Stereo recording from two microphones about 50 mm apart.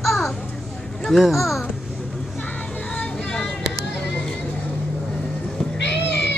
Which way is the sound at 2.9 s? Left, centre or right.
Left.